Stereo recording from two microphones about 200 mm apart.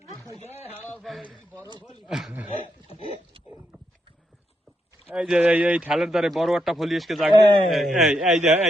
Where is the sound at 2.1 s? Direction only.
Centre (ahead or behind).